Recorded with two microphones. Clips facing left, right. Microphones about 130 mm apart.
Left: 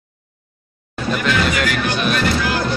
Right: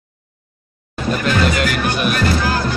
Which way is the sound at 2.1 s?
35° right (ahead or behind).